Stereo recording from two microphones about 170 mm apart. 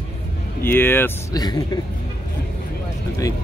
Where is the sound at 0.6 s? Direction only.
10° left (ahead or behind).